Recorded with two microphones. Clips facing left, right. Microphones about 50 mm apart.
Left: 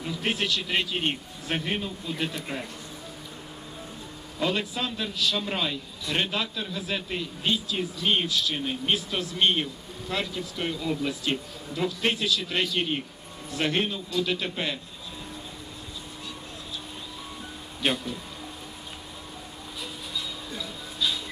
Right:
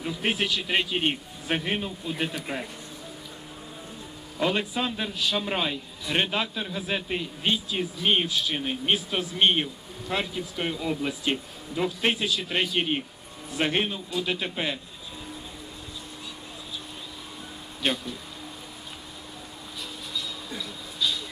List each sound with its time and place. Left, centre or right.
0.2 s speech: centre
4.4 s a man's voice: centre
17.8 s speech: centre
20.5 s a sound: centre